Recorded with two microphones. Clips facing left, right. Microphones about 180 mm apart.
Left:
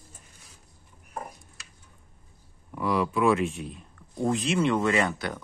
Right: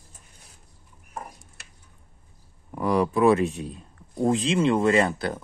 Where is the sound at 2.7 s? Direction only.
45° right (ahead or behind).